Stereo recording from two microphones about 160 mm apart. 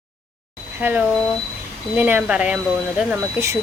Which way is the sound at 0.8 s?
10° right (ahead or behind).